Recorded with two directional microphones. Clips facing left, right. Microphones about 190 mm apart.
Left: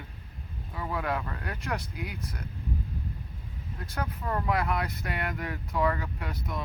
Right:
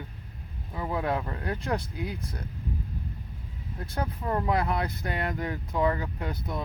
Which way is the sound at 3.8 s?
30° right (ahead or behind).